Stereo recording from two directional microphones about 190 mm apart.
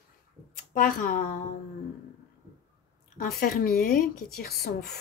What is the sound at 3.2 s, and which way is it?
Speech, 50° left (ahead or behind).